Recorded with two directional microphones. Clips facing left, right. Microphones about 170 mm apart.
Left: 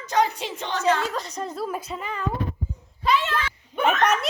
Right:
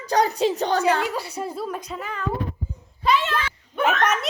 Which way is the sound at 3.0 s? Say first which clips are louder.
Right 1 dB; 20° right (ahead or behind).